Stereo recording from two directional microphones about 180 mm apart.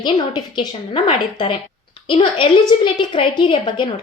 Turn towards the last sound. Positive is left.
turn(degrees=25)  # may be behind; listen again after turning